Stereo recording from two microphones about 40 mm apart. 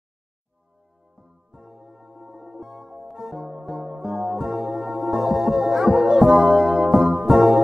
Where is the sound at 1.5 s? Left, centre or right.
Centre.